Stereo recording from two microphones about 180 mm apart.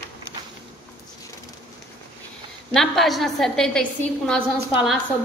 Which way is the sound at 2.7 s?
Centre (ahead or behind).